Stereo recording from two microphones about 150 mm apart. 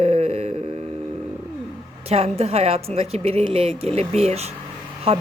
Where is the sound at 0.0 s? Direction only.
40° right (ahead or behind).